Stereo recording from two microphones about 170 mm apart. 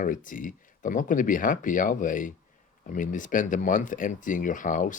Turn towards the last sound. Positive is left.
turn(degrees=50)  # may be behind; listen again after turning